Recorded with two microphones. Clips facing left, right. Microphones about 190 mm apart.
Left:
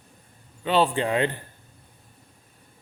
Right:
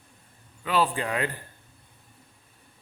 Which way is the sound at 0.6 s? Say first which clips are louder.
Left 4 dB; 25° left (ahead or behind).